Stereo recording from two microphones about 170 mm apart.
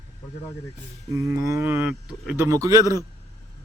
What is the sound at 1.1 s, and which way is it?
Speech, 20° right (ahead or behind).